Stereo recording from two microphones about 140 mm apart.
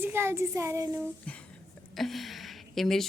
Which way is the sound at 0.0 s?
15° right (ahead or behind).